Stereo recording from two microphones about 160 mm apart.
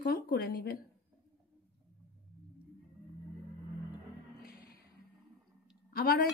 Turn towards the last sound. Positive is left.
turn(degrees=70)  # may be behind; listen again after turning